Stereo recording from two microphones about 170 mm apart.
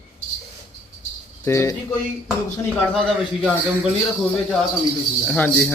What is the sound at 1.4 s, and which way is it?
Speech, 15° left (ahead or behind).